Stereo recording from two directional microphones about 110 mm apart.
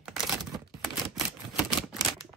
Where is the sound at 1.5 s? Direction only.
5° right (ahead or behind).